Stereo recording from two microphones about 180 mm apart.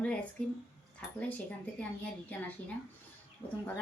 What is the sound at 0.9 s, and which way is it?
A woman's voice, 5° left (ahead or behind).